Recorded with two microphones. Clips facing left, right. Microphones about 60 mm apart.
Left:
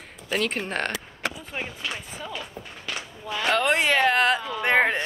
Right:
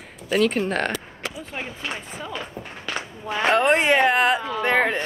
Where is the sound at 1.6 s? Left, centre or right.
Right.